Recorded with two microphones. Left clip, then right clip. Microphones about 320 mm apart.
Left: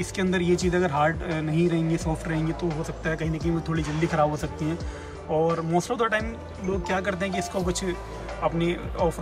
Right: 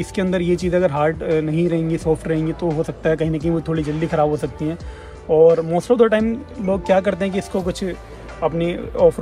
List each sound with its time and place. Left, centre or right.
0.0 s speech: centre